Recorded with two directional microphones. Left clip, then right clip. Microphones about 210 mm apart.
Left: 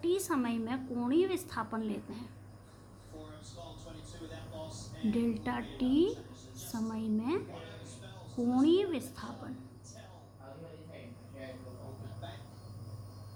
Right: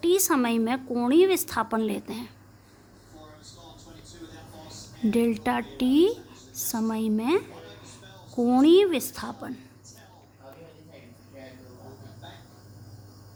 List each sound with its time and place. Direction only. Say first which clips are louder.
0.0 s a woman's voice: right 9 dB; 50° right (ahead or behind)
5.1 s a woman's voice: right 11 dB; 50° right (ahead or behind)
8.4 s a woman's voice: right 10 dB; 50° right (ahead or behind)